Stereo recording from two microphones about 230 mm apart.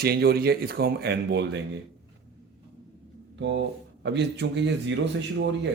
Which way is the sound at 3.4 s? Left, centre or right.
Right.